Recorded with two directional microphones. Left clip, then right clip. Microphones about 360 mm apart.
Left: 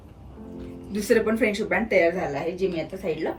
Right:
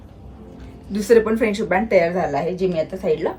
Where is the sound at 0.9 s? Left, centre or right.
Centre.